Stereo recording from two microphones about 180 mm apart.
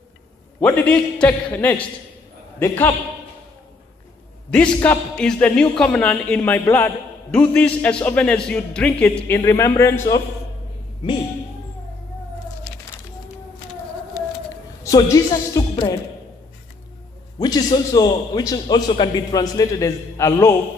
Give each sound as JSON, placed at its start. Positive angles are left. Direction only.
{"t": 0.6, "sound": "speech", "side_deg": 10}
{"t": 4.7, "sound": "speech", "side_deg": 5}
{"t": 14.8, "sound": "speech", "side_deg": 20}
{"t": 17.4, "sound": "a man's voice", "side_deg": 20}